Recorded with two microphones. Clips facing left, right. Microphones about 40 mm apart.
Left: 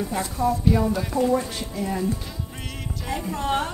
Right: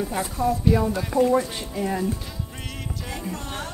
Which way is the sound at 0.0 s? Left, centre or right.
Centre.